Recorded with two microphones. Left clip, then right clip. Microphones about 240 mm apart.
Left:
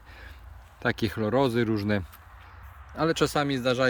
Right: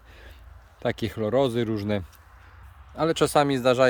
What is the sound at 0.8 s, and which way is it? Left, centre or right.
Speech, centre.